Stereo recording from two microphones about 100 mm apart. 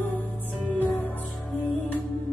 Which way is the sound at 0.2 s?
15° left (ahead or behind).